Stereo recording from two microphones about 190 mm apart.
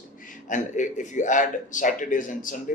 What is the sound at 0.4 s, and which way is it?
Speech, 40° left (ahead or behind).